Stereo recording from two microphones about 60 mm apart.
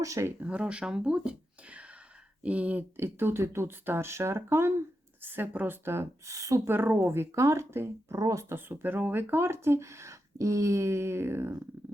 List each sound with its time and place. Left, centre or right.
0.0 s speech: right
0.4 s speech: centre
3.0 s speech: right
6.3 s speech: right
6.7 s speech: right
8.1 s speech: right
8.4 s speech: right